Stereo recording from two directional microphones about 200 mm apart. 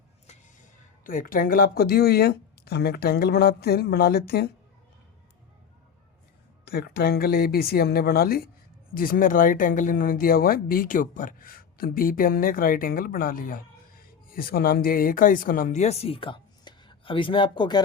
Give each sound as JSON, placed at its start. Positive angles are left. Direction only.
{"t": 0.3, "sound": "speech", "side_deg": 40}
{"t": 6.7, "sound": "speech", "side_deg": 55}